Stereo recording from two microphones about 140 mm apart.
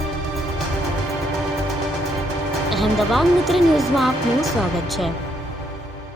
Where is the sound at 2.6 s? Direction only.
Centre (ahead or behind).